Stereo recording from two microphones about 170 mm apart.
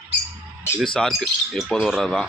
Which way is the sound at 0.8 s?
5° left (ahead or behind).